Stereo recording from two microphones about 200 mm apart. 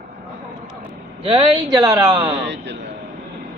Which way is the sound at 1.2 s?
25° right (ahead or behind).